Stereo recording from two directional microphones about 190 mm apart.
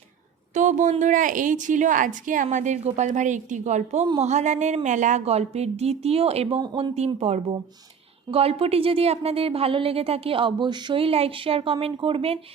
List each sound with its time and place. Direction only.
0.5 s a woman's voice: 40° right (ahead or behind)
4.0 s speech: 25° right (ahead or behind)
4.3 s a woman's voice: 40° right (ahead or behind)
6.9 s a woman's voice: 35° right (ahead or behind)